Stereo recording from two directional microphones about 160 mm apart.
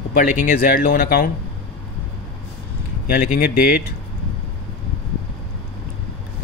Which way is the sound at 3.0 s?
60° left (ahead or behind).